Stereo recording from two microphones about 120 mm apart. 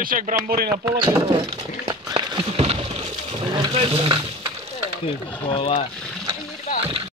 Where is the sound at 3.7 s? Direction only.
50° right (ahead or behind).